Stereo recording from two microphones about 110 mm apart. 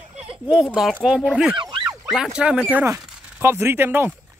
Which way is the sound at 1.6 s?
45° right (ahead or behind).